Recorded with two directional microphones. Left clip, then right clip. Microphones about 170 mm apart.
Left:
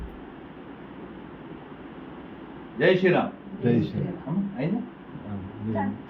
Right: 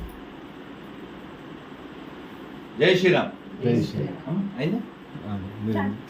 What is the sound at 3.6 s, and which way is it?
Speech, 5° right (ahead or behind).